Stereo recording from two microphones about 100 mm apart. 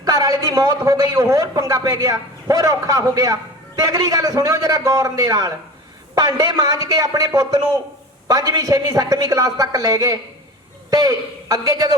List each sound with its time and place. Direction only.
0.0 s a man's voice: 40° right (ahead or behind)